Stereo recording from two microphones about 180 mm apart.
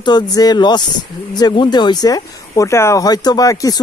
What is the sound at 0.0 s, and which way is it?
Speech, 20° left (ahead or behind).